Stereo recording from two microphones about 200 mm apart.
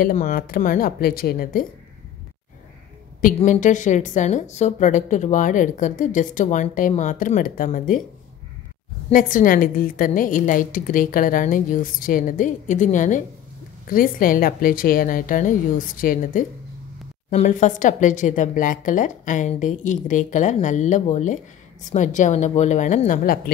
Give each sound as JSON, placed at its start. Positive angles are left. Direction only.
{"t": 0.0, "sound": "a woman's voice", "side_deg": 40}
{"t": 3.3, "sound": "a woman's voice", "side_deg": 40}
{"t": 9.1, "sound": "a woman's voice", "side_deg": 45}